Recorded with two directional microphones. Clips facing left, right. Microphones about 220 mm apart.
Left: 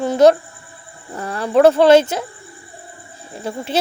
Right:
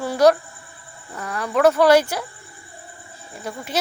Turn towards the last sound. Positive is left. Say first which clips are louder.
# left 5 dB
turn(degrees=30)  # may be behind; listen again after turning